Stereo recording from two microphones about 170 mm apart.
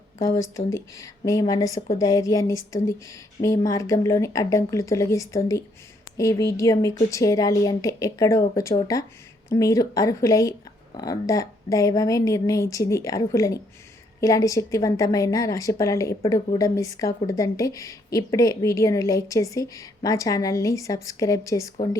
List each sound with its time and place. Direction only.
0.2 s a woman's voice: 20° left (ahead or behind)